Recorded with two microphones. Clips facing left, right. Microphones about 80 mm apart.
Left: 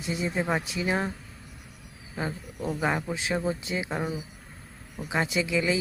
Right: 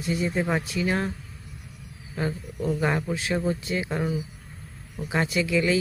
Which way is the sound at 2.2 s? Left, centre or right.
Centre.